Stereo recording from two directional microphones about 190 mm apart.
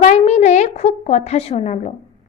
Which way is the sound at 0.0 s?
40° left (ahead or behind).